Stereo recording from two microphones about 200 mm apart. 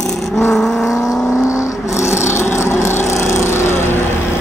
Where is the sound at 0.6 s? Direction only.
Centre (ahead or behind).